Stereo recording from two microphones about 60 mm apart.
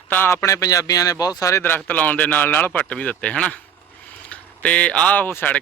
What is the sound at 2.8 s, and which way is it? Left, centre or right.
A man's voice, centre.